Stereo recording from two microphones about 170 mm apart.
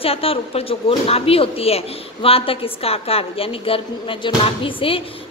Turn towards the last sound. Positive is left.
turn(degrees=35)  # may be behind; listen again after turning